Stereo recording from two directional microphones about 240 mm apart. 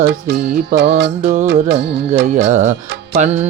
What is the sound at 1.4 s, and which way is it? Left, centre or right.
Music, right.